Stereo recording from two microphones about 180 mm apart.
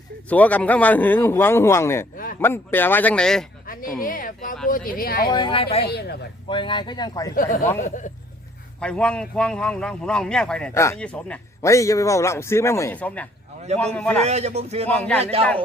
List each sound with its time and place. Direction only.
0.3 s speech: 10° left (ahead or behind)
3.7 s a sound: 50° left (ahead or behind)
4.0 s speech: 50° left (ahead or behind)
5.3 s speech: 30° left (ahead or behind)
5.9 s speech: 65° left (ahead or behind)
6.5 s speech: 25° left (ahead or behind)
7.8 s speech: 45° left (ahead or behind)
8.8 s a man's voice: 5° left (ahead or behind)
11.6 s a man's voice: 15° left (ahead or behind)
14.3 s a man's voice: 35° right (ahead or behind)
14.8 s speech: 5° left (ahead or behind)
15.2 s a man's voice: 35° right (ahead or behind)